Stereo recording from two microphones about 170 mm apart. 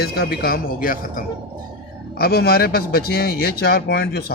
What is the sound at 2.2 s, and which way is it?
A man's voice, 65° left (ahead or behind).